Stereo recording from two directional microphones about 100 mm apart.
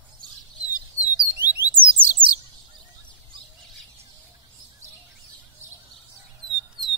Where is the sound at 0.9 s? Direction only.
20° right (ahead or behind).